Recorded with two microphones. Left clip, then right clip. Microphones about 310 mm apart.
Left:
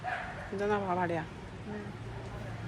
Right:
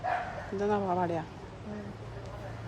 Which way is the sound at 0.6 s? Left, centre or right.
Centre.